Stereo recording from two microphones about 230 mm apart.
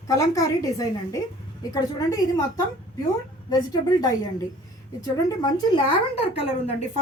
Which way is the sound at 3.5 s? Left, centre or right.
Centre.